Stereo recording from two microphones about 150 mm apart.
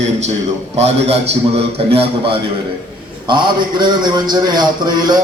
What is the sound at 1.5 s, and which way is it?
A man's voice, 40° right (ahead or behind).